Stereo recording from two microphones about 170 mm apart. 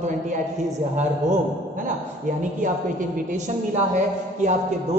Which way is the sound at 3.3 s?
45° right (ahead or behind).